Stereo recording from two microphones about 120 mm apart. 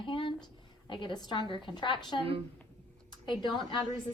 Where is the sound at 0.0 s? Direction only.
45° left (ahead or behind).